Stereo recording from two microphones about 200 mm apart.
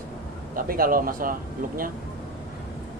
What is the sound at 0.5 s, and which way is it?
Speech, 45° right (ahead or behind).